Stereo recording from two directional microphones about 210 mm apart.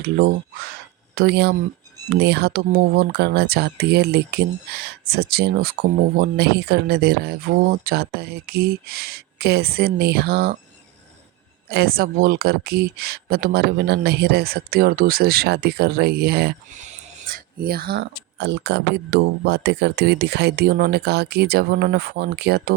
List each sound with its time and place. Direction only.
0.0 s speech: 45° right (ahead or behind)
11.7 s speech: 45° right (ahead or behind)
16.7 s speech: 35° right (ahead or behind)